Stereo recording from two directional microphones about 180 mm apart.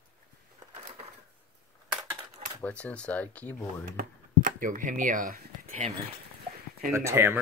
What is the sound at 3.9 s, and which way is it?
Speech, 50° right (ahead or behind).